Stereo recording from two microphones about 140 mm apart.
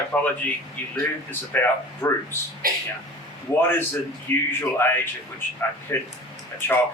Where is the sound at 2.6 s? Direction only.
90° right.